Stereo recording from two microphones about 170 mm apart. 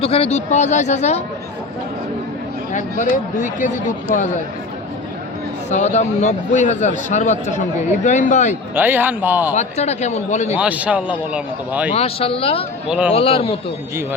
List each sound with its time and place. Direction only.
0.0 s speech: 35° left (ahead or behind)
3.0 s a man's voice: 50° left (ahead or behind)
5.7 s a man's voice: 45° left (ahead or behind)
8.7 s speech: 10° right (ahead or behind)
9.6 s speech: 40° left (ahead or behind)
10.5 s speech: 10° right (ahead or behind)
11.9 s speech: 35° left (ahead or behind)